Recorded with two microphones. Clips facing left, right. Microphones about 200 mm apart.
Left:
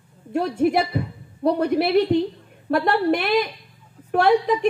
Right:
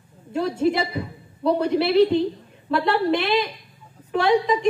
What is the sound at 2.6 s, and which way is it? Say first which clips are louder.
A woman's voice: left 1 dB; 50° left (ahead or behind).